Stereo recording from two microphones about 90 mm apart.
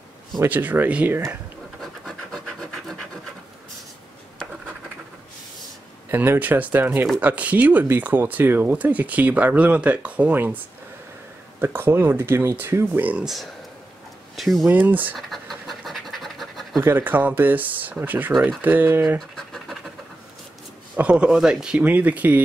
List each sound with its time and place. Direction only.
0.4 s speech: 20° right (ahead or behind)
1.8 s scratch: 5° left (ahead or behind)
6.0 s speech: 25° right (ahead or behind)
11.6 s speech: 25° right (ahead or behind)
13.2 s speech: centre (ahead or behind)
14.7 s speech: 20° right (ahead or behind)
15.1 s pant: centre (ahead or behind)
16.8 s speech: 20° right (ahead or behind)
19.3 s scratch: centre (ahead or behind)
20.9 s speech: 15° right (ahead or behind)